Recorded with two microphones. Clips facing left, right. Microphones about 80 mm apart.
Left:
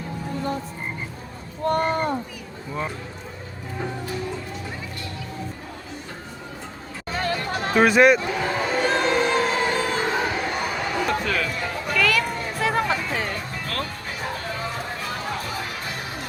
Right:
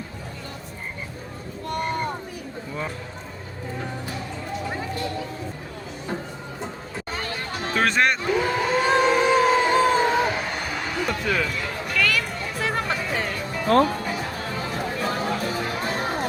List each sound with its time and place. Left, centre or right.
1.6 s a sound: left
7.2 s music: left
7.8 s speech: centre
8.8 s music: centre
10.2 s a sound: centre
11.9 s music: centre
13.7 s speech: right